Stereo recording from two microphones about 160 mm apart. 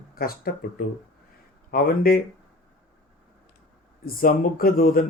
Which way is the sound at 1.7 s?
65° left (ahead or behind).